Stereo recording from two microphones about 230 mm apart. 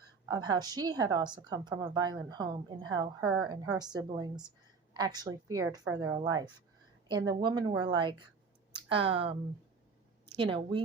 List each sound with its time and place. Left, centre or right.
0.3 s a woman's voice: centre